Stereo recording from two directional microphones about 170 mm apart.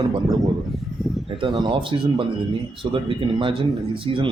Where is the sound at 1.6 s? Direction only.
30° right (ahead or behind).